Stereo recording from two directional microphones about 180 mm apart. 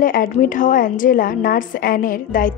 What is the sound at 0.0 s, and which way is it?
A woman's voice, 50° left (ahead or behind).